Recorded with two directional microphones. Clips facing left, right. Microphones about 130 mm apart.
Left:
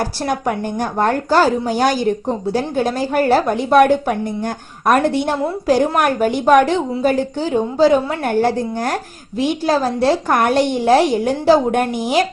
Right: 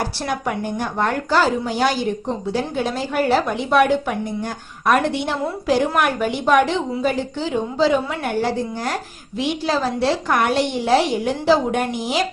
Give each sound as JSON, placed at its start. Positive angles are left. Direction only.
{"t": 0.0, "sound": "a woman's voice", "side_deg": 45}